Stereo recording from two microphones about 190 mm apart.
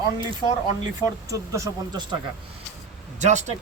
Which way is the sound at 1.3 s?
15° right (ahead or behind).